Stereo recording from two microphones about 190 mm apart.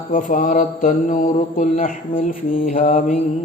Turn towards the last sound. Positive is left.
turn(degrees=45)  # may be behind; listen again after turning